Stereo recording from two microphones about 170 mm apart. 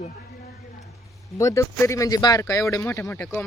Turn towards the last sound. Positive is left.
turn(degrees=15)  # may be behind; listen again after turning